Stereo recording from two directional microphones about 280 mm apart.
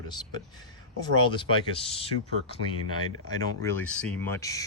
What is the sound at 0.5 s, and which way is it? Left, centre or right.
Speech, centre.